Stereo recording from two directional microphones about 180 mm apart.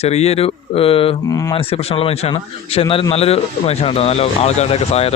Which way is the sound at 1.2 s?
20° left (ahead or behind).